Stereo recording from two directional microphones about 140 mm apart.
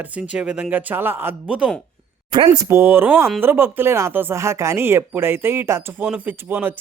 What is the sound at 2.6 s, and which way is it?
Speech, 20° right (ahead or behind).